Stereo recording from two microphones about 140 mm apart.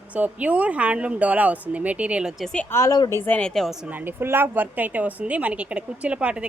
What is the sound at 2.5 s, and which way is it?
Speech, 20° left (ahead or behind).